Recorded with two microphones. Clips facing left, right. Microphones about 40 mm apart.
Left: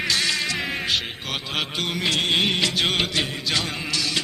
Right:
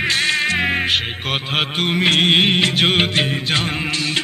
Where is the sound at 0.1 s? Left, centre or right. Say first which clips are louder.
Right 5 dB; right.